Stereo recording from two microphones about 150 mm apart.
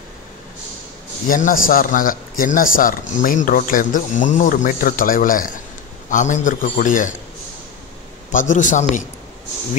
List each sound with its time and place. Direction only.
1.2 s a man's voice: 65° left (ahead or behind)
8.3 s a man's voice: 60° left (ahead or behind)